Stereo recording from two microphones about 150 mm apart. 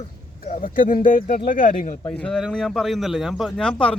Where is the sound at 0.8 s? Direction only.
60° left (ahead or behind).